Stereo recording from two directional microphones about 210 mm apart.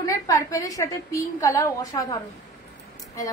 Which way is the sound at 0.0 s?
15° left (ahead or behind).